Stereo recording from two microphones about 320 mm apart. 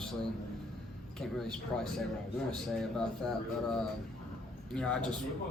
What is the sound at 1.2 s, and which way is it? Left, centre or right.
Speech, centre.